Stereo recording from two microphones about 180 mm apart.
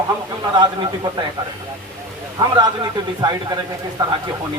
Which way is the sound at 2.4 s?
25° right (ahead or behind).